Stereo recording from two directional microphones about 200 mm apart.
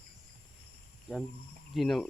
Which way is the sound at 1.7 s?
Centre (ahead or behind).